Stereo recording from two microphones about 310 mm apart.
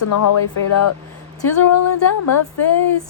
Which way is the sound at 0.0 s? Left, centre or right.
Left.